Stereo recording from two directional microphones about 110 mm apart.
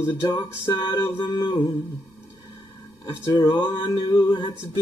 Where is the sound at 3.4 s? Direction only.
45° left (ahead or behind).